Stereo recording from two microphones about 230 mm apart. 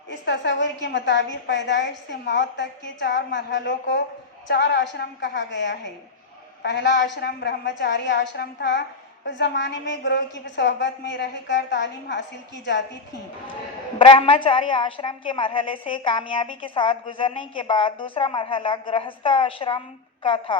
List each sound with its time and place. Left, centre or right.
0.1 s a woman's voice: left
14.0 s a woman's voice: left